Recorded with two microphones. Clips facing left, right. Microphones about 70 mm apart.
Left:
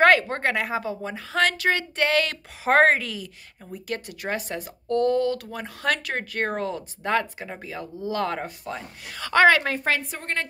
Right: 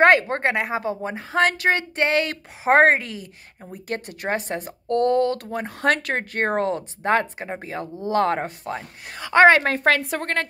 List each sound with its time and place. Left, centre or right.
0.0 s a woman's voice: right
9.2 s a woman's voice: right
9.6 s a woman's voice: right